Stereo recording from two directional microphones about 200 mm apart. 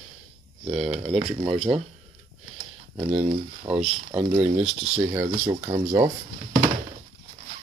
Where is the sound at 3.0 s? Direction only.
25° right (ahead or behind).